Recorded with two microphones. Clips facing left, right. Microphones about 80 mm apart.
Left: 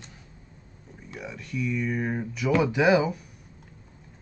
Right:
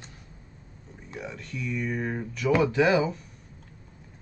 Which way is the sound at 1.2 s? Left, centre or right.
Centre.